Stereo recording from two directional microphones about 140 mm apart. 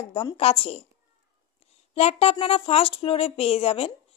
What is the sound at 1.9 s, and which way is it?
Speech, 45° left (ahead or behind).